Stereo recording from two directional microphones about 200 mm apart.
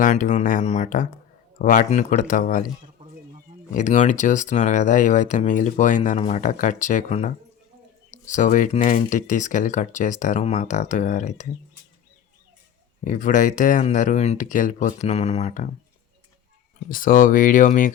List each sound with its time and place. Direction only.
0.0 s speech: 40° left (ahead or behind)
3.8 s speech: 40° left (ahead or behind)
13.1 s speech: 40° left (ahead or behind)
16.9 s speech: 45° left (ahead or behind)